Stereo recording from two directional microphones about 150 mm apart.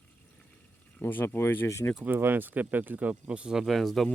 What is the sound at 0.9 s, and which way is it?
Speech, 15° left (ahead or behind).